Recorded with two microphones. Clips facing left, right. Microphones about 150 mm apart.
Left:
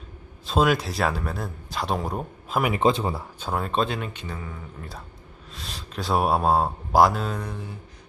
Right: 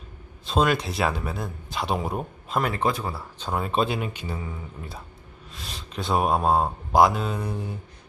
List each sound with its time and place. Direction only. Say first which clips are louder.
0.4 s speech: left 1 dB; centre (ahead or behind)
2.6 s speech: left 1 dB; 10° left (ahead or behind)
2.8 s speech: left 4 dB; 20° left (ahead or behind)
3.3 s speech: even; 10° left (ahead or behind)
3.6 s speech: right 2 dB; 5° right (ahead or behind)
5.5 s speech: even; centre (ahead or behind)